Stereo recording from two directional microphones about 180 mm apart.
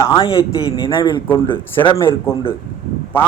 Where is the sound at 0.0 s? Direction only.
25° left (ahead or behind).